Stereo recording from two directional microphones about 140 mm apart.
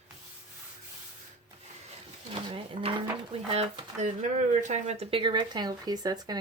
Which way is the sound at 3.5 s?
55° right (ahead or behind).